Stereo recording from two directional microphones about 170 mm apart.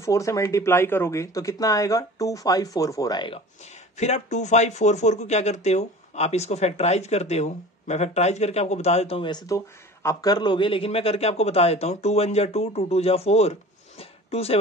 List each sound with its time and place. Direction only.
0.0 s speech: 20° left (ahead or behind)
3.9 s speech: 40° left (ahead or behind)